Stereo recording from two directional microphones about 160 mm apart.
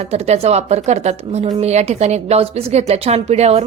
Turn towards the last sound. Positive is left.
turn(degrees=-40)  # may be behind; listen again after turning